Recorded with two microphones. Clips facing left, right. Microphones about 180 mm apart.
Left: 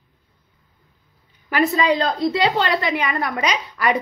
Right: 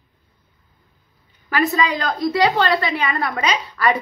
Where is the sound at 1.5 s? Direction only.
25° left (ahead or behind).